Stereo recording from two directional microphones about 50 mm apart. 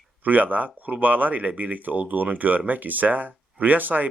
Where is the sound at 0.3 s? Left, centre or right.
Right.